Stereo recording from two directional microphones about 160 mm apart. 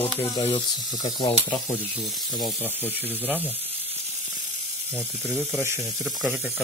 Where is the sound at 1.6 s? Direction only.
45° left (ahead or behind).